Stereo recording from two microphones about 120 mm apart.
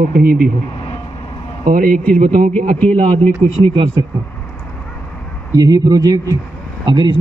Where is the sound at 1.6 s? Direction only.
90° right.